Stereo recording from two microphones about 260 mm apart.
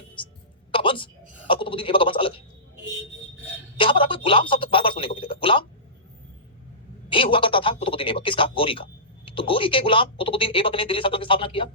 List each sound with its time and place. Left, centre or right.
0.7 s a woman's voice: centre
3.8 s a sound: centre
7.1 s speech: centre